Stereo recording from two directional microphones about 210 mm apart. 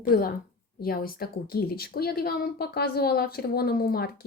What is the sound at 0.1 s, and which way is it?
Speech, 45° left (ahead or behind).